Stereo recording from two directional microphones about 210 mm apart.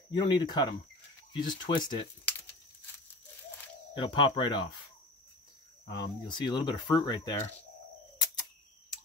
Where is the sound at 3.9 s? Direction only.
25° left (ahead or behind).